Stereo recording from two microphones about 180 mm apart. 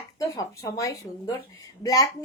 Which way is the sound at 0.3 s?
20° left (ahead or behind).